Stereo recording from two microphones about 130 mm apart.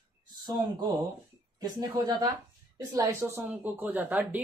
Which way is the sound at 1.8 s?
30° right (ahead or behind).